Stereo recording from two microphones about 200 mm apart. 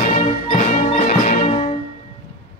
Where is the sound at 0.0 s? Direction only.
35° left (ahead or behind).